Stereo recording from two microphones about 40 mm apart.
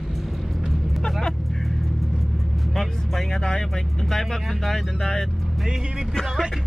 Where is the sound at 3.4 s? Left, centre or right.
Centre.